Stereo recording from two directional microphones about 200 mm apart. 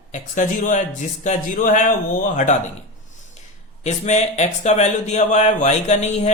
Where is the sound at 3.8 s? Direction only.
35° left (ahead or behind).